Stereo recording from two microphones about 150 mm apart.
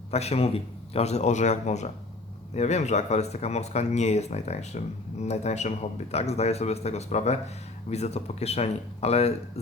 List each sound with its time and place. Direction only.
0.1 s a man's voice: 45° left (ahead or behind)